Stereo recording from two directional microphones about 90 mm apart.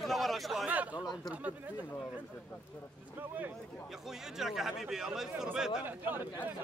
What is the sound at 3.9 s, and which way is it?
Speech, 5° right (ahead or behind).